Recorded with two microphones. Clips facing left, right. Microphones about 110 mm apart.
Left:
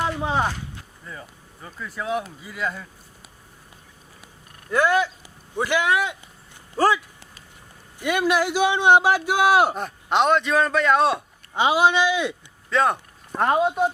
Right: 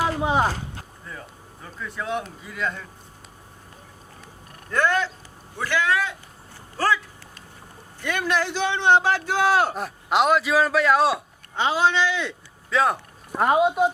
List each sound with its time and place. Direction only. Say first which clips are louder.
0.2 s speech: right 2 dB; 15° right (ahead or behind)
0.4 s a sound: right 2 dB; 40° right (ahead or behind)
1.0 s speech: left 3 dB; centre (ahead or behind)
4.7 s a man's voice: left 2 dB; 10° left (ahead or behind)
9.7 s speech: even; centre (ahead or behind)
11.5 s a man's voice: left 3 dB; 15° left (ahead or behind)
12.7 s speech: left 1 dB; centre (ahead or behind)